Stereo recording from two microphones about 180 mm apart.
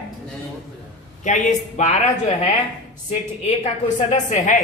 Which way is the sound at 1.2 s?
40° left (ahead or behind).